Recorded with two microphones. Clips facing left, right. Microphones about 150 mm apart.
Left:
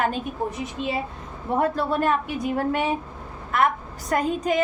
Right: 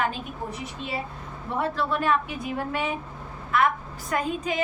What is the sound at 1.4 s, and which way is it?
Speech, 50° left (ahead or behind).